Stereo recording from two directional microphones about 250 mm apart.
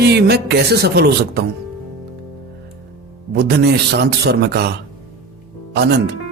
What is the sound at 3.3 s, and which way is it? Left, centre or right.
Speech, right.